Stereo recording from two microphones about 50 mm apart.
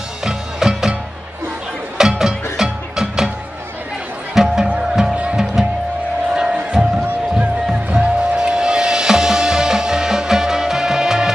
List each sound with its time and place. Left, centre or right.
0.2 s music: centre
2.0 s music: centre
4.4 s music: centre
7.9 s music: centre